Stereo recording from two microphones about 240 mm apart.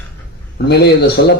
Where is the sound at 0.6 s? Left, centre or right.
Left.